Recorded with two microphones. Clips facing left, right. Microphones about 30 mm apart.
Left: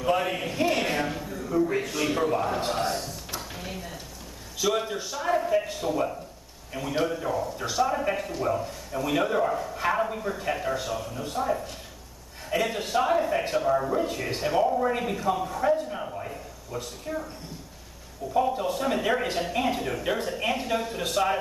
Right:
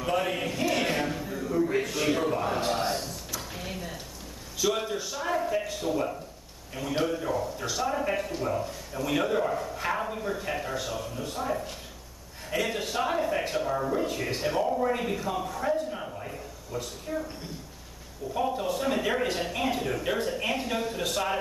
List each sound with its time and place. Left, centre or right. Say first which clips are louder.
0.1 s a man's voice: left 2 dB; centre
0.7 s a sound: left 1 dB; centre
1.3 s speech: left 1 dB; centre
2.8 s a sound: left 1 dB; centre
3.3 s drawer open or close: even; centre
4.6 s a man's voice: left 1 dB; centre
18.3 s speech: left 3 dB; centre